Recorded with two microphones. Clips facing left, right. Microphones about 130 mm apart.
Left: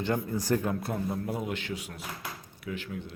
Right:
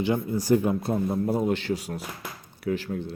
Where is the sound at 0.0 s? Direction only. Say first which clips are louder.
Right 4 dB; 10° right (ahead or behind); by 3.2 s 35° right (ahead or behind).